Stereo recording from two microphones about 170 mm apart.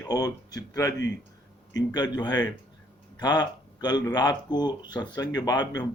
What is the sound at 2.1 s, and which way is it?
Speech, 25° left (ahead or behind).